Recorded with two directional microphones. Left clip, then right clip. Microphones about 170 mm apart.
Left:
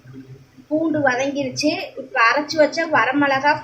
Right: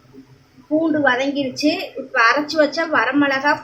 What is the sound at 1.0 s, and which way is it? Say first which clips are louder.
A woman's voice: right 1 dB; 5° right (ahead or behind).